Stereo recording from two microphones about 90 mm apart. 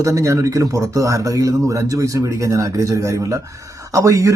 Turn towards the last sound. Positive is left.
turn(degrees=-35)  # may be behind; listen again after turning